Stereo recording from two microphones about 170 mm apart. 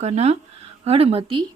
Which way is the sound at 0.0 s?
40° right (ahead or behind).